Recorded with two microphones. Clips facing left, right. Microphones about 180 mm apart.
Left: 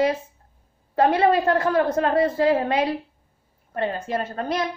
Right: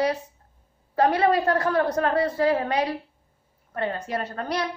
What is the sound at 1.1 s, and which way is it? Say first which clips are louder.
A child's voice: left 2 dB; 25° left (ahead or behind).